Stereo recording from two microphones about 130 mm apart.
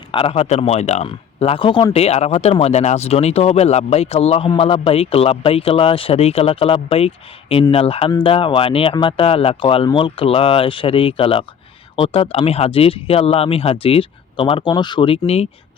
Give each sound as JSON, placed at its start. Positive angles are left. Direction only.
{"t": 0.1, "sound": "speech", "side_deg": 45}